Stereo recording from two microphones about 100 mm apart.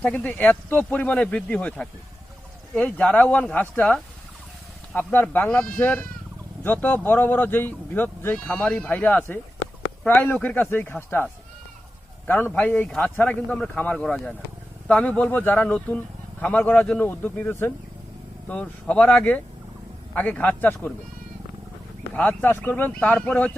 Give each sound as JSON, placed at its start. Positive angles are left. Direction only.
{"t": 0.0, "sound": "a man's voice", "side_deg": 15}
{"t": 12.5, "sound": "speech", "side_deg": 15}
{"t": 22.1, "sound": "speech", "side_deg": 15}